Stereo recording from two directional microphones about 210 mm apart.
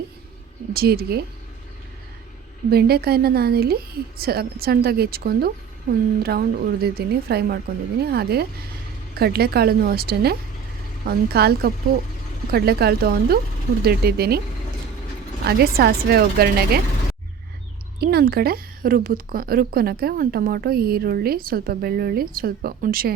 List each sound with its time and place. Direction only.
0.7 s a woman's voice: 45° right (ahead or behind)
2.6 s a woman's voice: 50° right (ahead or behind)
15.4 s a woman's voice: 50° right (ahead or behind)
18.0 s a woman's voice: 50° right (ahead or behind)